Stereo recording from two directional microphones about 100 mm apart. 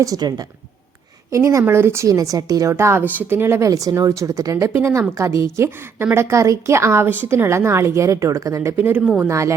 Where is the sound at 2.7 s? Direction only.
25° right (ahead or behind).